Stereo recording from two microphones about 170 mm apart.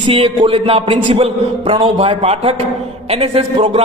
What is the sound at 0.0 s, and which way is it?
A man's voice, 30° right (ahead or behind).